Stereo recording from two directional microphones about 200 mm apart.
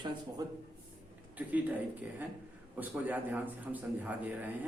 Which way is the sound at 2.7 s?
10° right (ahead or behind).